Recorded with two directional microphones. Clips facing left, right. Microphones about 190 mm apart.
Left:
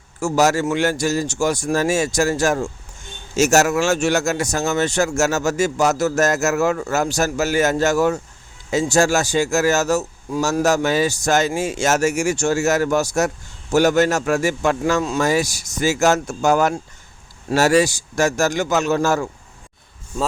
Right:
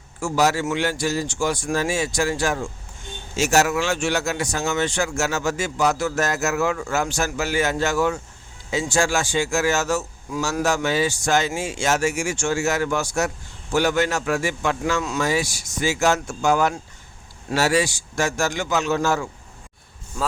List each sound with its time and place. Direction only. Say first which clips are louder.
0.2 s speech: left 3 dB; 45° left (ahead or behind)